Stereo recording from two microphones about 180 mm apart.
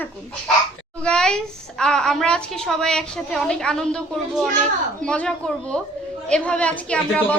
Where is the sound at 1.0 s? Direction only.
5° left (ahead or behind).